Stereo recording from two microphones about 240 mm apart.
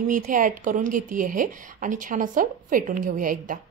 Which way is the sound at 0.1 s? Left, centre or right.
Right.